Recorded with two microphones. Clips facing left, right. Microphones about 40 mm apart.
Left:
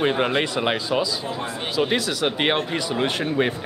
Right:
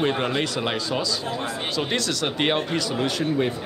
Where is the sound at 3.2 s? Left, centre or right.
Left.